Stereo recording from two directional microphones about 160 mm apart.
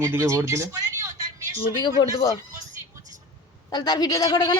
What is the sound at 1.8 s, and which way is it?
Speech, 25° left (ahead or behind).